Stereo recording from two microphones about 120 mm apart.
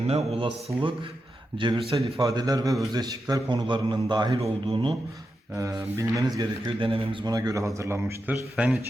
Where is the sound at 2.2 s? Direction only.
30° right (ahead or behind).